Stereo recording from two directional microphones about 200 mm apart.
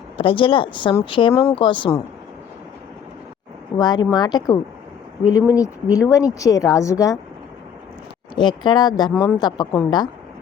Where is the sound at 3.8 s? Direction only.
20° left (ahead or behind).